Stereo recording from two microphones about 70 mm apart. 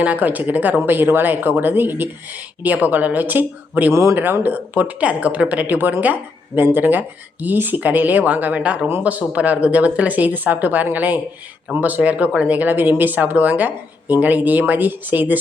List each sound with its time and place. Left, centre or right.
0.0 s speech: right
3.9 s speech: right
4.2 s speech: right